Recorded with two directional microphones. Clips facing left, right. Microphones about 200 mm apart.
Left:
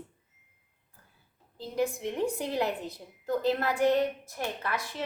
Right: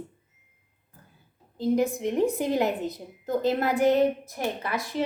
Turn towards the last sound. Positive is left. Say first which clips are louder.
# right 4 dB
turn(degrees=-15)  # may be behind; listen again after turning